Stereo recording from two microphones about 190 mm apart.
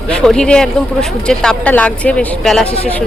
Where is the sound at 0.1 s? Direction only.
5° left (ahead or behind).